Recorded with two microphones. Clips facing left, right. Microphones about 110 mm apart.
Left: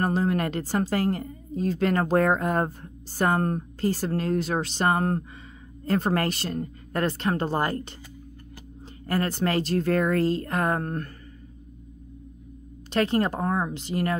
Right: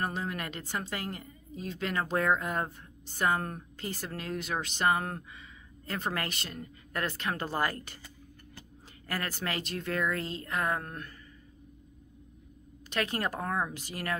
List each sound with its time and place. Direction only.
0.0 s a woman's voice: 40° left (ahead or behind)
9.0 s a woman's voice: 30° left (ahead or behind)
12.9 s speech: 30° left (ahead or behind)